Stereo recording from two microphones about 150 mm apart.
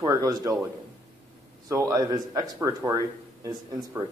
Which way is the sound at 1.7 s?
20° right (ahead or behind).